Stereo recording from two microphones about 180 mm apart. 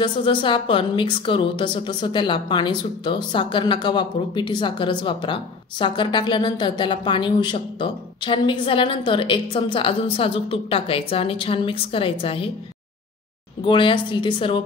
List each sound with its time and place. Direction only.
0.0 s a woman's voice: 25° left (ahead or behind)
13.7 s a woman's voice: 25° left (ahead or behind)